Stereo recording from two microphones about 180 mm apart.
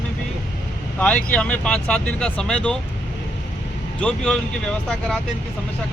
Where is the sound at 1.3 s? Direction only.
5° left (ahead or behind).